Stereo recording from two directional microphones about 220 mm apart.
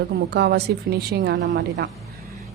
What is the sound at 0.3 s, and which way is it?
A woman's voice, 50° right (ahead or behind).